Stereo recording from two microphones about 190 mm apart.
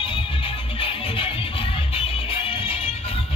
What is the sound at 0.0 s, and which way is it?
Music, 30° left (ahead or behind).